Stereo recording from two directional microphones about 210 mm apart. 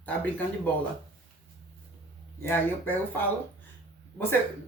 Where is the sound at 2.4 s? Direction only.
10° left (ahead or behind).